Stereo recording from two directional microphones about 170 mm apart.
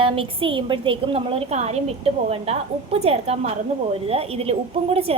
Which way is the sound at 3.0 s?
35° right (ahead or behind).